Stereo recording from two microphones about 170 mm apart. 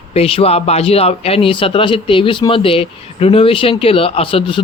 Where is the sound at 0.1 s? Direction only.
35° left (ahead or behind).